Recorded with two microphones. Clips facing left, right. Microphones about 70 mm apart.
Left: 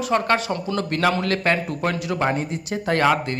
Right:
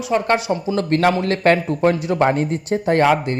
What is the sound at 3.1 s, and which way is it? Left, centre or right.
Speech, right.